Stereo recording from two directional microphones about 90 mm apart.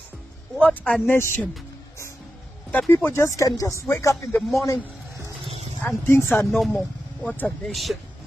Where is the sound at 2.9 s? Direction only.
25° left (ahead or behind).